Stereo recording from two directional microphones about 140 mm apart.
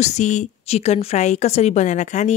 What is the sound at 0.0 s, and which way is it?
Speech, 55° left (ahead or behind).